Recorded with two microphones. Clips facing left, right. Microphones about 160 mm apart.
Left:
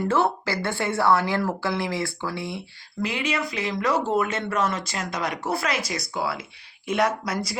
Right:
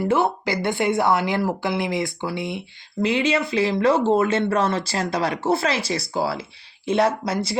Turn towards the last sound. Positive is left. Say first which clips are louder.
# right 4 dB
turn(degrees=-25)  # may be behind; listen again after turning